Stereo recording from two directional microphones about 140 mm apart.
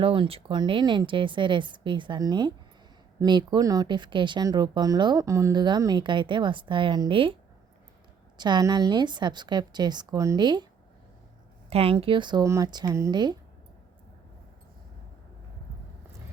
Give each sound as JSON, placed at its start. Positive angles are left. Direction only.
{"t": 0.0, "sound": "speech", "side_deg": -40}
{"t": 8.4, "sound": "speech", "side_deg": -30}
{"t": 11.7, "sound": "speech", "side_deg": -40}